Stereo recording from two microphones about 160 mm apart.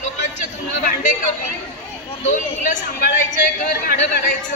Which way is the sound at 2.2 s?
50° left (ahead or behind).